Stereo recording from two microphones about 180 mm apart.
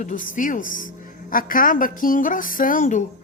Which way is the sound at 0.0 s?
45° left (ahead or behind).